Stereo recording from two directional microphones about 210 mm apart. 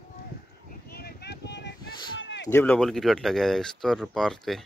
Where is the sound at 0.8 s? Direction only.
50° left (ahead or behind).